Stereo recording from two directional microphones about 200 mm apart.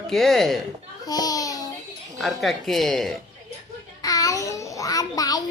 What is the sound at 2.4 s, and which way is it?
Speech, centre (ahead or behind).